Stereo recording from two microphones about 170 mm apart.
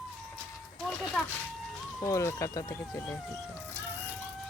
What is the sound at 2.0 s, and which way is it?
Speech, 15° left (ahead or behind).